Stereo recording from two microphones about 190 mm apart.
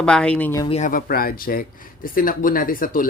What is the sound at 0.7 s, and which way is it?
Speech, 40° left (ahead or behind).